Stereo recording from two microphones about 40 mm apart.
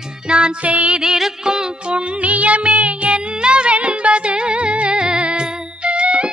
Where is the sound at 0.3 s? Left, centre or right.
Right.